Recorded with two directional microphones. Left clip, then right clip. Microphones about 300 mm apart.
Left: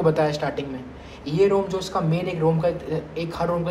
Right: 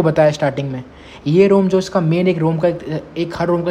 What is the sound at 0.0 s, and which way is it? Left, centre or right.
A man's voice, right.